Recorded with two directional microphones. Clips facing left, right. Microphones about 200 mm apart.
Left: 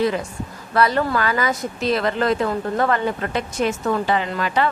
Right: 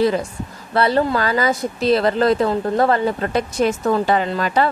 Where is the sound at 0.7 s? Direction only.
30° right (ahead or behind).